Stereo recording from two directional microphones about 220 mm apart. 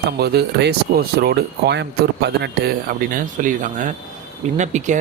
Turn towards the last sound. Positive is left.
turn(degrees=-35)  # may be behind; listen again after turning